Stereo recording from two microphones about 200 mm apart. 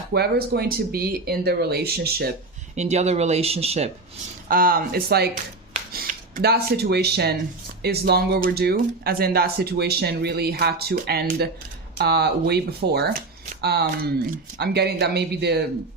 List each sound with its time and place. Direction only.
0.1 s speech: 55° right (ahead or behind)
2.7 s speech: 35° right (ahead or behind)
4.4 s speech: 45° right (ahead or behind)